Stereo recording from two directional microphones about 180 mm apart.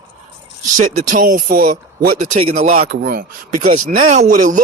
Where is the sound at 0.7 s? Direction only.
45° right (ahead or behind).